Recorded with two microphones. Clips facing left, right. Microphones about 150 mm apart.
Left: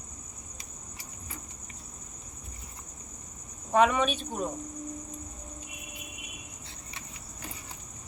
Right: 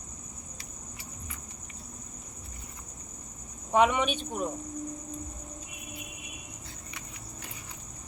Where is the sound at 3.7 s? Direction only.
15° right (ahead or behind).